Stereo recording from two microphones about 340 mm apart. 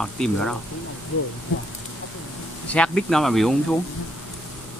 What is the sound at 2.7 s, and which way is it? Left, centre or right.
Speech, centre.